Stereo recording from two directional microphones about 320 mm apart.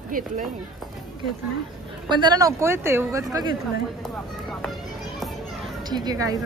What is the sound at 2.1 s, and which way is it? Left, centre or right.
Speech, centre.